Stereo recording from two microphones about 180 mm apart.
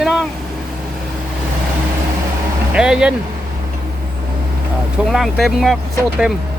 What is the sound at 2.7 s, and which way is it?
Speech, 5° right (ahead or behind).